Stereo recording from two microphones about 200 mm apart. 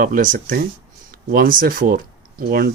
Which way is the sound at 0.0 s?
45° right (ahead or behind).